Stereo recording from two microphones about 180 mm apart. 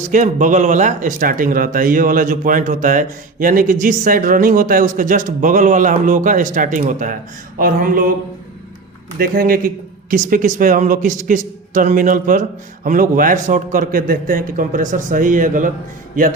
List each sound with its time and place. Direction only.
0.0 s speech: 45° right (ahead or behind)
9.1 s speech: 55° right (ahead or behind)